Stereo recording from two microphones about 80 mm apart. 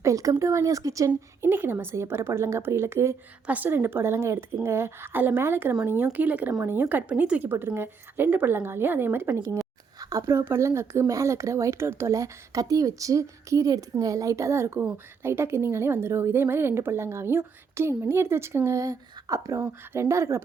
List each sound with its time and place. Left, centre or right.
0.0 s a woman's voice: right
1.4 s speech: right
3.4 s speech: right
7.5 s speech: right
10.0 s speech: right
19.5 s speech: right